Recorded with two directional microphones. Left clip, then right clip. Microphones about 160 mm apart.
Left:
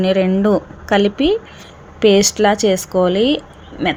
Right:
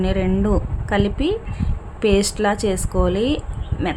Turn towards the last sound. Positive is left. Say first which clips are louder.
# left 6 dB
turn(degrees=15)  # may be behind; listen again after turning